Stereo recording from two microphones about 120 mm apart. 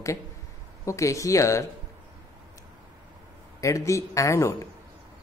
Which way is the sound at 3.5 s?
25° left (ahead or behind).